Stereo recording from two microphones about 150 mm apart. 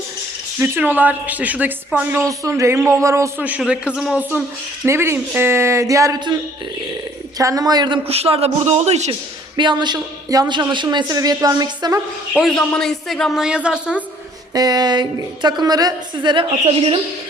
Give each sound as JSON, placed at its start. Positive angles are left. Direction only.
{"t": 0.6, "sound": "a woman's voice", "side_deg": -10}
{"t": 9.6, "sound": "a woman's voice", "side_deg": -30}
{"t": 12.3, "sound": "speech", "side_deg": -5}
{"t": 14.5, "sound": "a woman's voice", "side_deg": -25}